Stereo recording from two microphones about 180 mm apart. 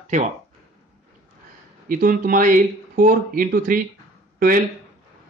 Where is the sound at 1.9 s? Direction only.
50° right (ahead or behind).